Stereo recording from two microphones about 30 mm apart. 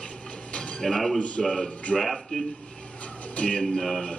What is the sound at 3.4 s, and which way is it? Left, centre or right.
Speech, left.